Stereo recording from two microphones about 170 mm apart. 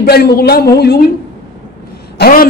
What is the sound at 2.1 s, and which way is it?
Speech, 65° left (ahead or behind).